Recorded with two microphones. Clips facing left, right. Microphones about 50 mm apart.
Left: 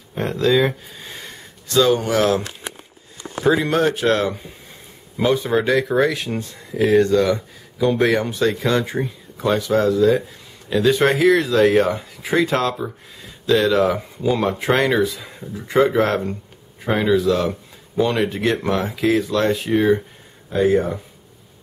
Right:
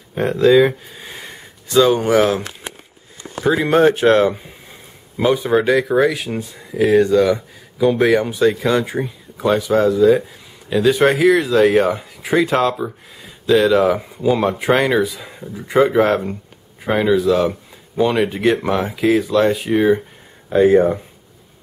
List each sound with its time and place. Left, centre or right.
0.2 s speech: centre
3.6 s speech: right; by 20.0 s centre
20.4 s speech: right